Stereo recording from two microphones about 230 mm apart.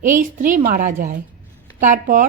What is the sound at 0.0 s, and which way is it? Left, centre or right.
A woman's voice, right.